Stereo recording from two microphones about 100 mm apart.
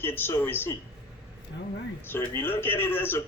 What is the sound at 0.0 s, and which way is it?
Speech, 20° left (ahead or behind).